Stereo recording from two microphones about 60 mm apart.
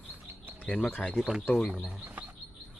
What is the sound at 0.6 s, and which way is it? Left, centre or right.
Speech, left.